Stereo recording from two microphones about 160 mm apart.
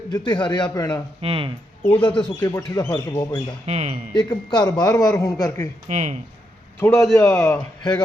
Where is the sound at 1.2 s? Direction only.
35° right (ahead or behind).